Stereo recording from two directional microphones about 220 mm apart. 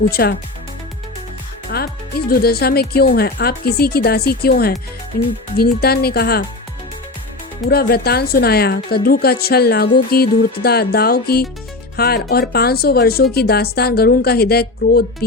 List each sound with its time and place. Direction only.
0.1 s speech: 45° left (ahead or behind)
1.7 s speech: 45° left (ahead or behind)
7.7 s speech: 45° left (ahead or behind)